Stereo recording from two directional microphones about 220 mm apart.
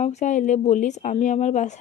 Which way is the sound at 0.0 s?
30° left (ahead or behind).